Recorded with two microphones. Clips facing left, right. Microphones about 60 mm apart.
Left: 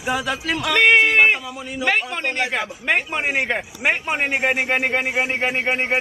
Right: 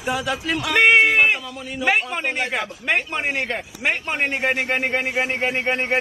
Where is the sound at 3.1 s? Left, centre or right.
Centre.